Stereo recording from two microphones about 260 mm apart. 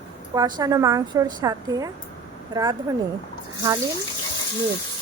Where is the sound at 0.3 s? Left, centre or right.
Centre.